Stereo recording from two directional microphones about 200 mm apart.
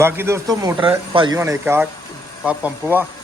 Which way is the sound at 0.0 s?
15° right (ahead or behind).